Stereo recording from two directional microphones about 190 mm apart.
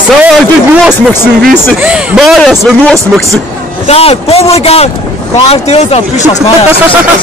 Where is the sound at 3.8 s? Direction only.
30° left (ahead or behind).